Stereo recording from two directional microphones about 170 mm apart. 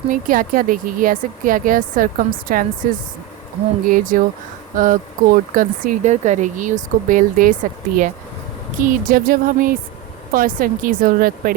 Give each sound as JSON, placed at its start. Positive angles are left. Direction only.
{"t": 0.1, "sound": "speech", "side_deg": -55}
{"t": 3.8, "sound": "speech", "side_deg": -50}